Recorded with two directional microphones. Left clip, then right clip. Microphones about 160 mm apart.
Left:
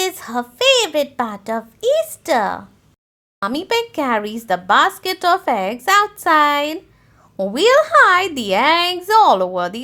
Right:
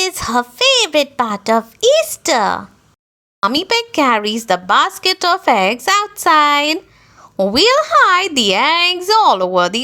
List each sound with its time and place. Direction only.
0.0 s a child's voice: 25° right (ahead or behind)